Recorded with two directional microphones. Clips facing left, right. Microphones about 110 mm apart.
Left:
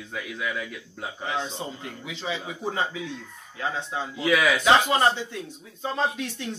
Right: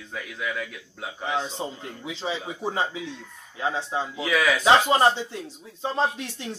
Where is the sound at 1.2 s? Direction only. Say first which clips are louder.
Right 2 dB; 10° right (ahead or behind).